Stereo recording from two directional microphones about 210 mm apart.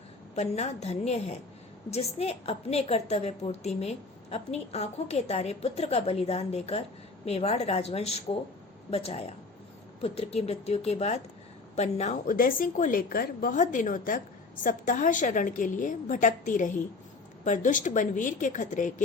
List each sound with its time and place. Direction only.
0.3 s a woman's voice: 30° left (ahead or behind)